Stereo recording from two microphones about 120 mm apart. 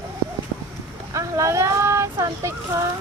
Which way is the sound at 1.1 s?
25° right (ahead or behind).